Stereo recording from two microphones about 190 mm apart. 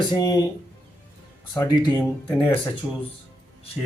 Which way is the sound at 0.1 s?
20° left (ahead or behind).